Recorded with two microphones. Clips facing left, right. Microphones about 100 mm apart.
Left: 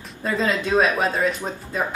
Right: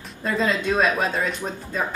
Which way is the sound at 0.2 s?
5° left (ahead or behind).